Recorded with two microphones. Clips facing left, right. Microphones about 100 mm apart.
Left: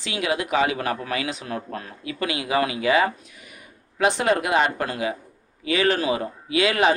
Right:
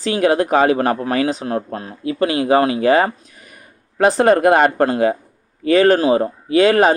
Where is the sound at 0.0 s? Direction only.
40° right (ahead or behind).